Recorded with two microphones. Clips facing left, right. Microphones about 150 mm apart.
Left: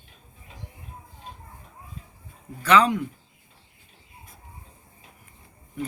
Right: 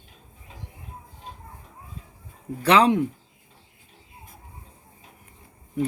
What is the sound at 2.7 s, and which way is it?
Speech, 65° right (ahead or behind).